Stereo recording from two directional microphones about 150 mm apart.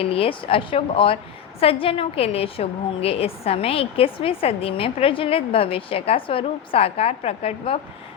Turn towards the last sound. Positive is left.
turn(degrees=40)  # may be behind; listen again after turning